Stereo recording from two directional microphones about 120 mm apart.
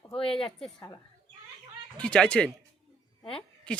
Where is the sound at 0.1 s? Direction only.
50° left (ahead or behind).